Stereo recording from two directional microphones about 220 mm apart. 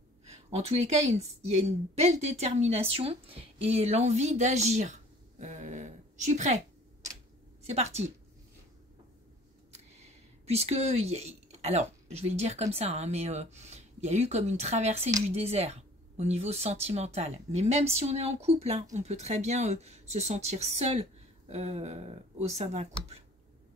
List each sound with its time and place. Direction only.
0.3 s speech: 30° right (ahead or behind)
5.4 s a sound: 35° right (ahead or behind)
7.6 s speech: 30° right (ahead or behind)
10.4 s speech: 30° right (ahead or behind)